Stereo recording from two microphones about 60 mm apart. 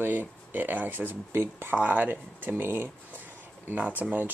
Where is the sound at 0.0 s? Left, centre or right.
Right.